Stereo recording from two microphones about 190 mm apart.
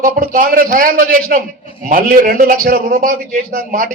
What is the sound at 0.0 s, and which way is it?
A man's voice, 45° right (ahead or behind).